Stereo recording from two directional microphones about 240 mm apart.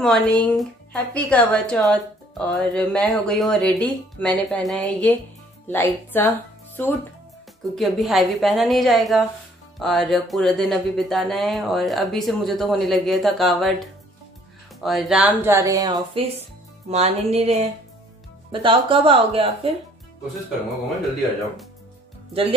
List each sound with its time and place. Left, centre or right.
0.0 s a woman's voice: centre
7.7 s a woman's voice: centre; by 19.7 s right